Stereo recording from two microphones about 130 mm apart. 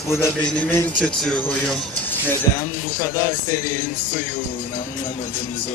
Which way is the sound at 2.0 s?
15° left (ahead or behind).